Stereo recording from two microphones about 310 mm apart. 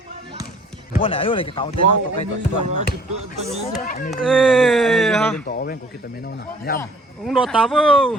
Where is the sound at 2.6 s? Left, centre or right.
Right.